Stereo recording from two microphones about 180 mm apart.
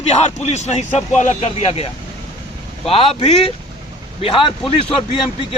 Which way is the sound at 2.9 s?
30° left (ahead or behind).